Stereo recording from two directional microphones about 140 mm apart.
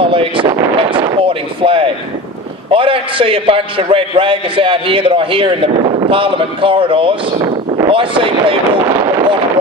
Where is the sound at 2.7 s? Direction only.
40° right (ahead or behind).